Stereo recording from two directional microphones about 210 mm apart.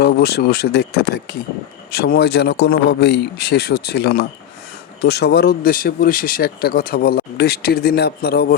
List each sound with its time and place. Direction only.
0.0 s speech: 50° left (ahead or behind)